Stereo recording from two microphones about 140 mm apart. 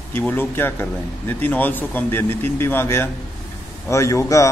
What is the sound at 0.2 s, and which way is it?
A man's voice, 15° left (ahead or behind).